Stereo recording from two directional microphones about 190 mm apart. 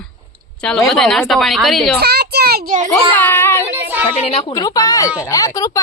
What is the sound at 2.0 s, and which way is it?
Speech, 55° right (ahead or behind).